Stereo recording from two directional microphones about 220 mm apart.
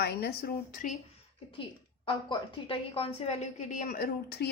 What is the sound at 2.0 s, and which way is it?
A woman's voice, 25° left (ahead or behind).